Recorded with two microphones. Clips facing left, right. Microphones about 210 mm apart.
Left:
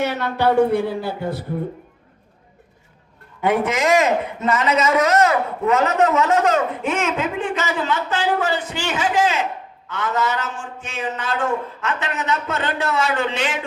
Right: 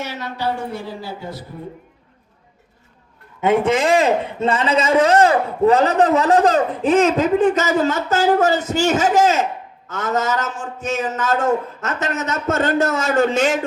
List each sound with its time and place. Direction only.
0.0 s a woman's voice: 60° left (ahead or behind)
3.4 s a man's voice: 25° right (ahead or behind); by 13.7 s 45° right (ahead or behind)